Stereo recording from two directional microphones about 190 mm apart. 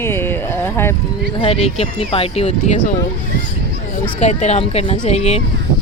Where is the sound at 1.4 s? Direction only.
30° left (ahead or behind).